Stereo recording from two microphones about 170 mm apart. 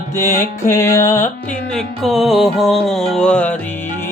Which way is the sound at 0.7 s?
15° left (ahead or behind).